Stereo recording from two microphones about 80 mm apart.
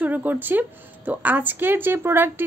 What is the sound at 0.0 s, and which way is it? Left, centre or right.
A woman's voice, right.